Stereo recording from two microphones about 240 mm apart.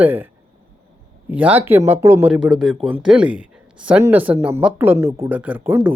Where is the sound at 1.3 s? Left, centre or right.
Centre.